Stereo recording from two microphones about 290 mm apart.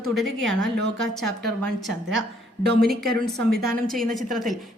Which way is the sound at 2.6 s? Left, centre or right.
Right.